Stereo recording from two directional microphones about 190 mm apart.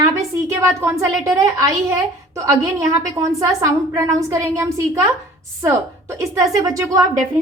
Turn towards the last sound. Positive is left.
turn(degrees=-15)  # may be behind; listen again after turning